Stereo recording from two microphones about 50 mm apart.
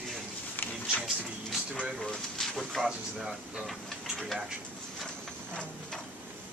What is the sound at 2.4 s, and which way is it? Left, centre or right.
Speech, centre.